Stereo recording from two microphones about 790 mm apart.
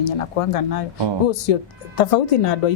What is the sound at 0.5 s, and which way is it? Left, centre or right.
Speech, left.